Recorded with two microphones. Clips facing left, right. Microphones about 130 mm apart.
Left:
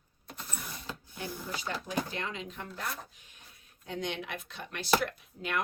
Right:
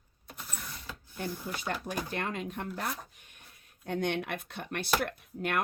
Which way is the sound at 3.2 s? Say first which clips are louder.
Right 1 dB; 55° right (ahead or behind).